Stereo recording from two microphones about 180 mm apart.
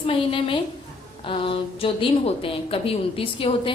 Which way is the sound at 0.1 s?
30° left (ahead or behind).